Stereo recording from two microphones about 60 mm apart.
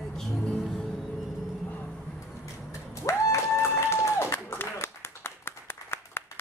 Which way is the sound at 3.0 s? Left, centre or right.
Left.